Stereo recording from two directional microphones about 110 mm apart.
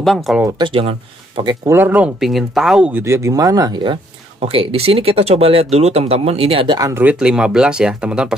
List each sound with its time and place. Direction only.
0.0 s speech: centre (ahead or behind)
0.6 s speech: 55° right (ahead or behind)
1.7 s speech: 15° right (ahead or behind)
2.1 s speech: centre (ahead or behind)
2.9 s speech: 25° right (ahead or behind); by 4.0 s 45° right (ahead or behind)
4.4 s speech: 60° right (ahead or behind)
6.9 s speech: 20° right (ahead or behind)
7.2 s speech: 10° right (ahead or behind)